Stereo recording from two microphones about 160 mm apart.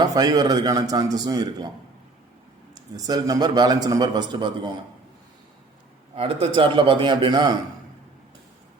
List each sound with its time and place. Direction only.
0.0 s a man's voice: 25° right (ahead or behind)
2.7 s a man's voice: 25° right (ahead or behind)
6.1 s a man's voice: 35° right (ahead or behind)